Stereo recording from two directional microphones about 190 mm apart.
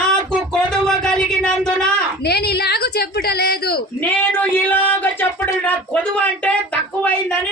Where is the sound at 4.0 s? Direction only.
10° left (ahead or behind).